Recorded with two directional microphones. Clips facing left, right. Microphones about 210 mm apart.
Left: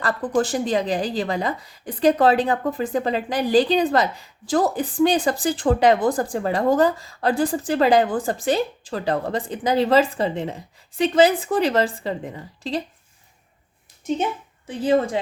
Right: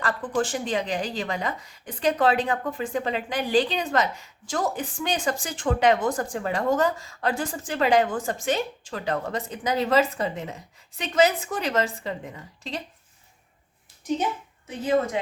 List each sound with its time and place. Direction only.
0.0 s a woman's voice: 40° left (ahead or behind)
14.7 s a woman's voice: 30° left (ahead or behind)